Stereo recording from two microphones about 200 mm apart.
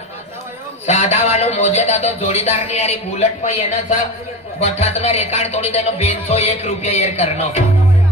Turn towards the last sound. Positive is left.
turn(degrees=30)  # may be behind; listen again after turning